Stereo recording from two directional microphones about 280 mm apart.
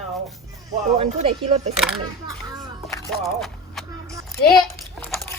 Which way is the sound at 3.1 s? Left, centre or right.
Centre.